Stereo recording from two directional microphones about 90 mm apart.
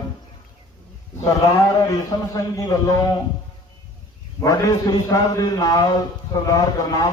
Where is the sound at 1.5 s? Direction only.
40° left (ahead or behind).